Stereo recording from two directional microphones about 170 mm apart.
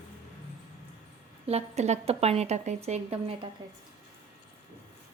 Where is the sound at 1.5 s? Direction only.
40° right (ahead or behind).